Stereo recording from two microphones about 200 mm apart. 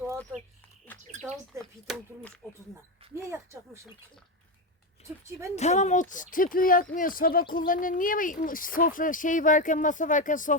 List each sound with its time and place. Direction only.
0.9 s speech: 5° left (ahead or behind)
3.2 s speech: 15° right (ahead or behind)
5.5 s speech: 35° left (ahead or behind)